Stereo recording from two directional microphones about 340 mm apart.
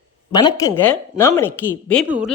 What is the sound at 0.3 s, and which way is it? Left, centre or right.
A woman's voice, centre.